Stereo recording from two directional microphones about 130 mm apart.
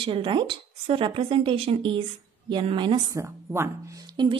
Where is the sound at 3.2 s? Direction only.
20° right (ahead or behind).